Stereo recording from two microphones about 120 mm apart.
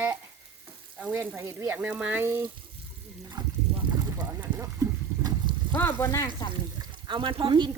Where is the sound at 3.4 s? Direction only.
35° right (ahead or behind).